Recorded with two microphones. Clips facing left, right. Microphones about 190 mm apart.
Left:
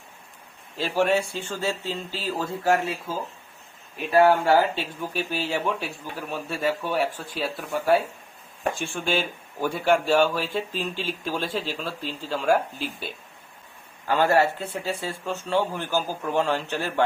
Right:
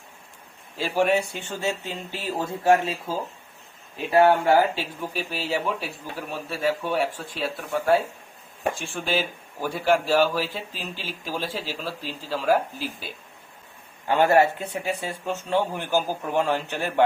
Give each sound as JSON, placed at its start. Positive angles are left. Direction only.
{"t": 0.8, "sound": "speech", "side_deg": -15}
{"t": 4.1, "sound": "speech", "side_deg": -25}
{"t": 4.7, "sound": "speech", "side_deg": -5}
{"t": 14.1, "sound": "a man's voice", "side_deg": -20}